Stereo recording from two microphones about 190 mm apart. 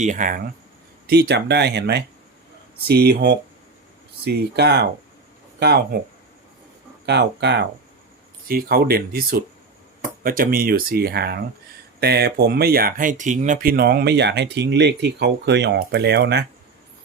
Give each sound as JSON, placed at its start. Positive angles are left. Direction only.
{"t": 0.0, "sound": "speech", "side_deg": -40}
{"t": 1.0, "sound": "speech", "side_deg": -60}
{"t": 7.0, "sound": "speech", "side_deg": -60}
{"t": 8.4, "sound": "speech", "side_deg": -50}